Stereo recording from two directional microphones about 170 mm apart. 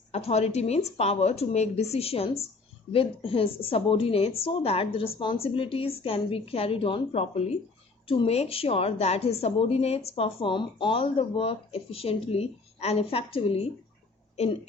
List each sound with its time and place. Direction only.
0.1 s a woman's voice: 35° left (ahead or behind)